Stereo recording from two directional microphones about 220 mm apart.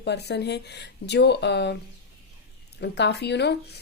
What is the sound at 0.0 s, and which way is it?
Speech, 50° left (ahead or behind).